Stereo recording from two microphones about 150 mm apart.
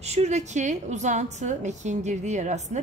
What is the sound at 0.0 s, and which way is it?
A woman's voice, 45° right (ahead or behind).